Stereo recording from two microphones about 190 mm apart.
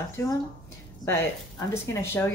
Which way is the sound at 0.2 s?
15° left (ahead or behind).